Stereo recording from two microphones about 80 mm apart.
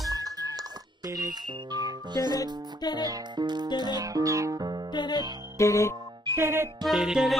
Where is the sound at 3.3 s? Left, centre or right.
Right.